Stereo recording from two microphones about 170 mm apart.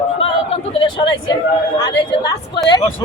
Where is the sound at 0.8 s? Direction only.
25° left (ahead or behind).